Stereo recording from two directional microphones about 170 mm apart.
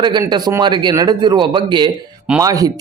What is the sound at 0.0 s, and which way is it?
A man's voice, 25° right (ahead or behind).